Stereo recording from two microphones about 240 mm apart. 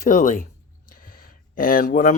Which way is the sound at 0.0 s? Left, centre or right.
Left.